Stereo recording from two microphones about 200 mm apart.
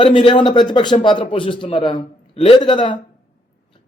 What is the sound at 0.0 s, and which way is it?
A man's voice, 25° left (ahead or behind).